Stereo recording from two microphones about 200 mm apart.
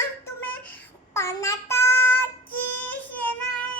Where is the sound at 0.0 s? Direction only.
10° left (ahead or behind).